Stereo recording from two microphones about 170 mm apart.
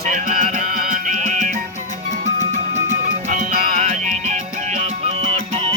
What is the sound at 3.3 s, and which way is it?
Music, 55° right (ahead or behind).